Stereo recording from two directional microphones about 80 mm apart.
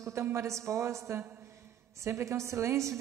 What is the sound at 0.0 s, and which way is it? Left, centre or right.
A woman's voice, right.